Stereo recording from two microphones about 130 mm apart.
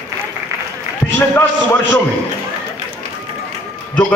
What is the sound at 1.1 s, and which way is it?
Speech, 15° left (ahead or behind).